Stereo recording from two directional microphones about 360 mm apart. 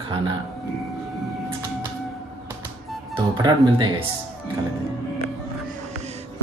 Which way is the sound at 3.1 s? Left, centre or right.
Centre.